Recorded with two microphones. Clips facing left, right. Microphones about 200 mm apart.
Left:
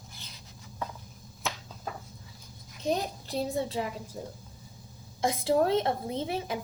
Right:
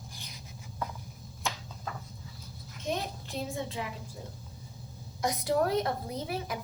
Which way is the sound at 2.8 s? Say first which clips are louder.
Left 4 dB; 35° left (ahead or behind).